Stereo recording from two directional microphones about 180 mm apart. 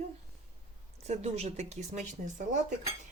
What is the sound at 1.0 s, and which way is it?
A woman's voice, 35° right (ahead or behind).